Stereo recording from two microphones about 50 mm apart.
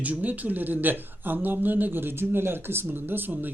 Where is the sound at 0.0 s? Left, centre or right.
Right.